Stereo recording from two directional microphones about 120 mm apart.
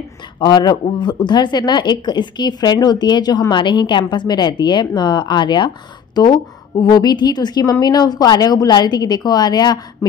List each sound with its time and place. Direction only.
0.4 s a woman's voice: 35° left (ahead or behind)
6.8 s a woman's voice: 35° left (ahead or behind)